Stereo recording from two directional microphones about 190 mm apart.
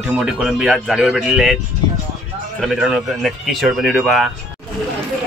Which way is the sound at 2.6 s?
Centre (ahead or behind).